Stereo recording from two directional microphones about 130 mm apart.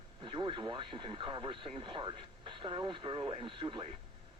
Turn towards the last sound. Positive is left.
turn(degrees=-40)  # may be behind; listen again after turning